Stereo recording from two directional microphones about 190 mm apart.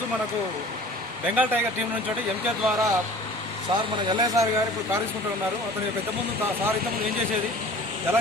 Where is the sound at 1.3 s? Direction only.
10° right (ahead or behind).